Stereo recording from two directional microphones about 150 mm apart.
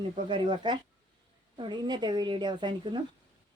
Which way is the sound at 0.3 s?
30° right (ahead or behind).